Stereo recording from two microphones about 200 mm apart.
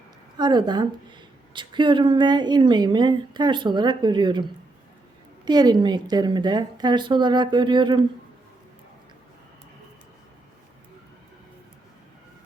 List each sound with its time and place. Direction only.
0.3 s speech: 20° right (ahead or behind)
5.5 s speech: 20° right (ahead or behind)